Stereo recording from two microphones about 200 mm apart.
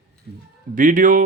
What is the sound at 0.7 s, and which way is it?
Speech, 40° right (ahead or behind).